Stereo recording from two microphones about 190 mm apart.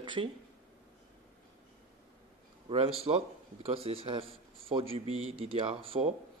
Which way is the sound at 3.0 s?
30° right (ahead or behind).